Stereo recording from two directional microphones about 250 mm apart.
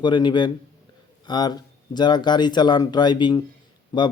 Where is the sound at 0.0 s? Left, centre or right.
Centre.